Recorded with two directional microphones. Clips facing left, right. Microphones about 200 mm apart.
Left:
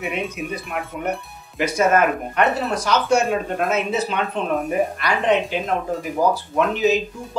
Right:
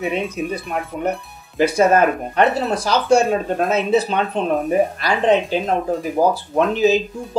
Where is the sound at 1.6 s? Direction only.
30° right (ahead or behind).